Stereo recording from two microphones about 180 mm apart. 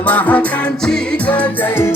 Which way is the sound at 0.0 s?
10° left (ahead or behind).